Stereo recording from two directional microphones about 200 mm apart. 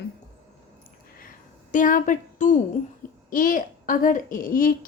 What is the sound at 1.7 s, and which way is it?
A woman's voice, 40° left (ahead or behind).